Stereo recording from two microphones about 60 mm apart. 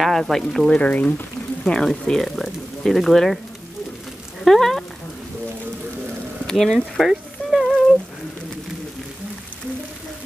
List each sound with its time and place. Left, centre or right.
0.0 s speech: centre
0.7 s speech: left
1.6 s speech: centre
4.5 s speech: centre
6.4 s speech: centre
7.1 s a sound: centre